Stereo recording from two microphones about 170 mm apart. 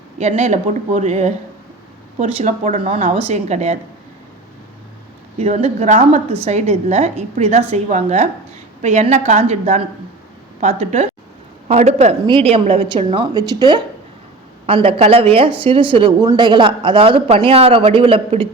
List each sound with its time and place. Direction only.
0.2 s a woman's voice: 40° right (ahead or behind)
2.8 s speech: 35° right (ahead or behind)
5.4 s a woman's voice: 35° right (ahead or behind)